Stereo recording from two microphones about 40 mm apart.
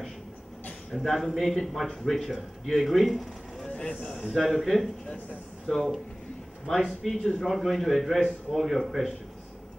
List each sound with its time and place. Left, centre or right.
0.9 s speech: centre
3.7 s speech: left
4.1 s speech: centre